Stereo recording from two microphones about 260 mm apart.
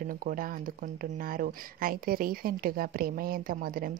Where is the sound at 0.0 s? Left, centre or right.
Right.